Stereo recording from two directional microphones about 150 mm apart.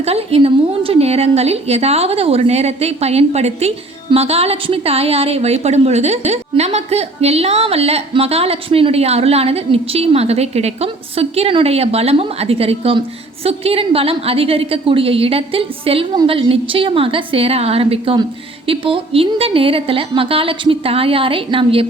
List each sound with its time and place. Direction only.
0.0 s a woman's voice: 40° right (ahead or behind)